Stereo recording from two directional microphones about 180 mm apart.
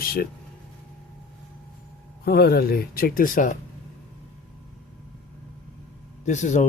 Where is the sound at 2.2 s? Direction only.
60° left (ahead or behind).